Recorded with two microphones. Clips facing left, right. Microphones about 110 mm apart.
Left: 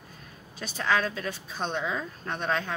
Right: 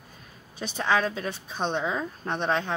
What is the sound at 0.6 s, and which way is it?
Speech, 20° right (ahead or behind).